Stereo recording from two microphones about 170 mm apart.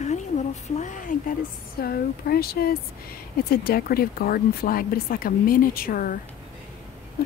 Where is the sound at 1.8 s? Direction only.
65° left (ahead or behind).